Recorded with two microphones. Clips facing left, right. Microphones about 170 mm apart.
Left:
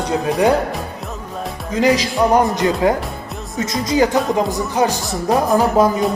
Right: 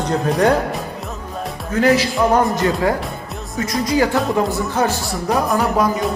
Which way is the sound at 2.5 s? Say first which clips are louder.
Left 2 dB; 20° left (ahead or behind).